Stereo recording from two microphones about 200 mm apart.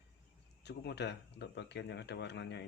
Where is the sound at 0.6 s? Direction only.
55° left (ahead or behind).